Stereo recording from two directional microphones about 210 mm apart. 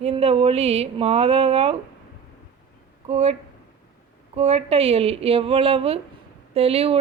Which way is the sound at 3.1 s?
30° right (ahead or behind).